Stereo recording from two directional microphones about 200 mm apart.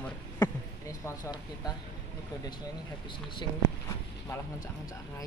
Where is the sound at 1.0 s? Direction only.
20° left (ahead or behind).